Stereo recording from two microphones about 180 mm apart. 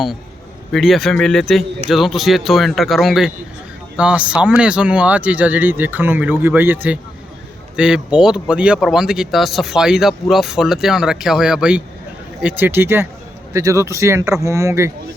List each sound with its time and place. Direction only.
0.7 s speech: centre (ahead or behind); by 14.9 s 15° right (ahead or behind)